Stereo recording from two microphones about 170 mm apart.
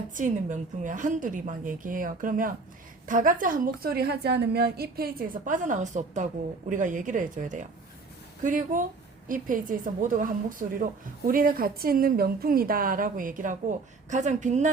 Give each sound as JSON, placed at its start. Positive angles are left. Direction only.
{"t": 0.1, "sound": "a woman's voice", "side_deg": -45}